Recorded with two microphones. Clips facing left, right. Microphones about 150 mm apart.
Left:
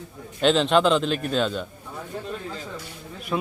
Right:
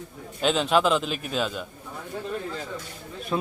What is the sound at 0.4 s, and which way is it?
A man's voice, 5° right (ahead or behind).